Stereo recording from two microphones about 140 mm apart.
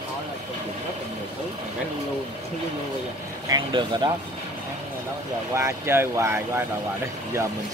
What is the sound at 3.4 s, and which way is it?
Speech, 30° right (ahead or behind).